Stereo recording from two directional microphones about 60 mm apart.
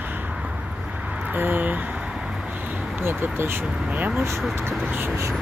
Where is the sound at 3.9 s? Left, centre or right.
Right.